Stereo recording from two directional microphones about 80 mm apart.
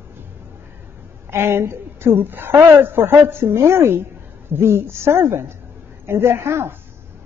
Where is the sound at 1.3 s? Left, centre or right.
Right.